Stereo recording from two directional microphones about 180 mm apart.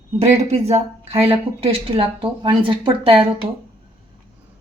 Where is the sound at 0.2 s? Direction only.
35° right (ahead or behind).